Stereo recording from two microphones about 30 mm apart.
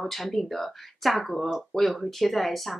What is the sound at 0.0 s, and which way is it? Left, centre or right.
Speech, centre.